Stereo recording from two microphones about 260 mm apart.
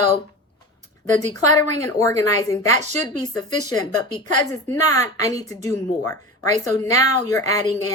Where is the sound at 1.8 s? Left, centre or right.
Centre.